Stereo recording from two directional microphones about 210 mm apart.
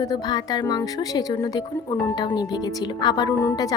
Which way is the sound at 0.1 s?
20° left (ahead or behind).